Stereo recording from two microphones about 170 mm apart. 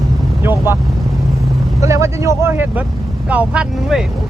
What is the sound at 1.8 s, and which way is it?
Speech, 15° right (ahead or behind).